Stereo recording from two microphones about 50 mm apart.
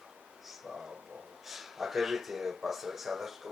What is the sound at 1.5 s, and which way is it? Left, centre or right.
Speech, centre.